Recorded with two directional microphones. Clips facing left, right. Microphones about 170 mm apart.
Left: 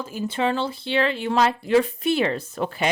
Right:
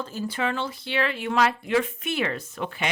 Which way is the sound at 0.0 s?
15° left (ahead or behind).